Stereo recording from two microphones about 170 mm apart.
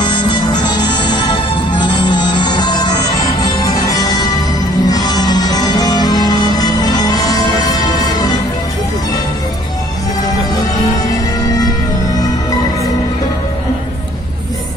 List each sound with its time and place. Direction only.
0.0 s music: 25° left (ahead or behind)